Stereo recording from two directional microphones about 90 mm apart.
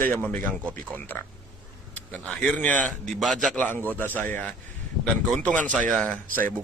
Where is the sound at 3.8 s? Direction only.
20° left (ahead or behind).